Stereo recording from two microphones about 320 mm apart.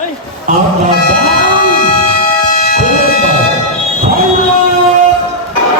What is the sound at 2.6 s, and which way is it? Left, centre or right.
Music, left.